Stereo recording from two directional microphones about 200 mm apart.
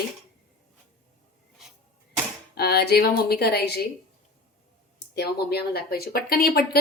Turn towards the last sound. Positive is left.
turn(degrees=50)  # may be behind; listen again after turning